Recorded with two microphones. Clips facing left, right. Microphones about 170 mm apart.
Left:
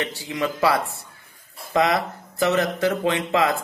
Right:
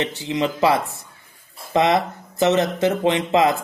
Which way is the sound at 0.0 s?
20° right (ahead or behind).